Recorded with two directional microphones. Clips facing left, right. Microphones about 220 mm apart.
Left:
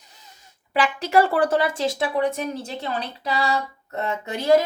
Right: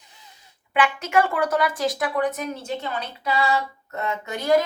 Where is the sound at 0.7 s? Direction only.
35° left (ahead or behind).